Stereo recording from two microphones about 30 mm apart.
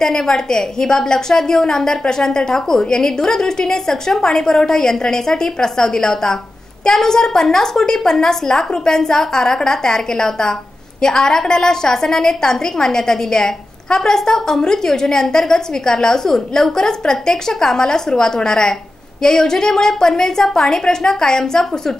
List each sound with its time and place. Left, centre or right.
0.0 s a woman's voice: centre